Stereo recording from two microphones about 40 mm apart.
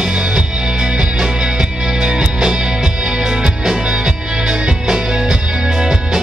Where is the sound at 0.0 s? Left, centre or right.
Centre.